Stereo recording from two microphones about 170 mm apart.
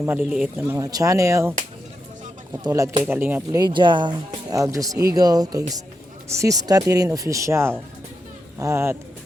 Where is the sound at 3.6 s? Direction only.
25° right (ahead or behind).